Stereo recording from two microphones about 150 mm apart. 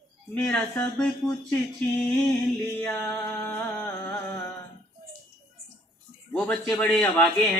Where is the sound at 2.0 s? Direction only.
5° left (ahead or behind).